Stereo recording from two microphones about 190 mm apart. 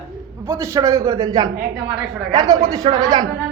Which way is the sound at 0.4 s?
15° right (ahead or behind).